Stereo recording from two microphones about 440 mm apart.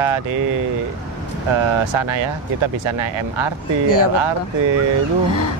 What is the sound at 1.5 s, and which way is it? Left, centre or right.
Speech, right.